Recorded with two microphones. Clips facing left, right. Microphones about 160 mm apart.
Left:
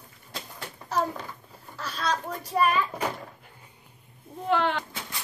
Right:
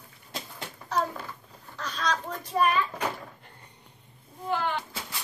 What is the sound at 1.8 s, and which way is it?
A child's voice, 5° left (ahead or behind).